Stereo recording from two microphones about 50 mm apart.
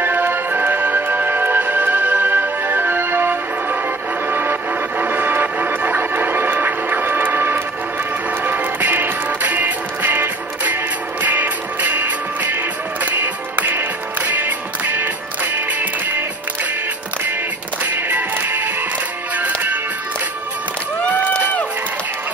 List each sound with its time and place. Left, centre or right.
0.0 s music: right
17.8 s music: right
21.0 s a sound: left